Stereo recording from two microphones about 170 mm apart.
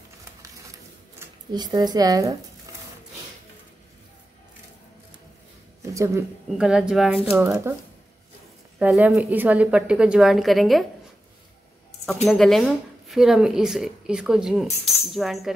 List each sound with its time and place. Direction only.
1.5 s speech: 25° right (ahead or behind)
5.8 s speech: 15° right (ahead or behind)
6.6 s speech: 5° right (ahead or behind)
7.2 s speech: 15° right (ahead or behind)
8.7 s speech: 5° right (ahead or behind)
12.3 s speech: centre (ahead or behind)